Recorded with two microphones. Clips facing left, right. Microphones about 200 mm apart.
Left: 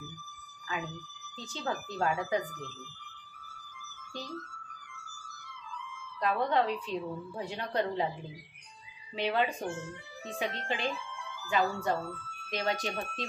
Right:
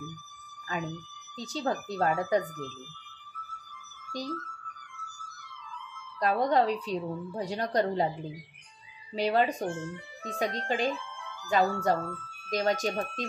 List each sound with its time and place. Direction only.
0.7 s a woman's voice: 40° right (ahead or behind)
6.1 s a woman's voice: 40° right (ahead or behind)
9.1 s a woman's voice: 40° right (ahead or behind)